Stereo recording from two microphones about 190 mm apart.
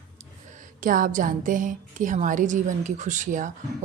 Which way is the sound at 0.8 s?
45° right (ahead or behind).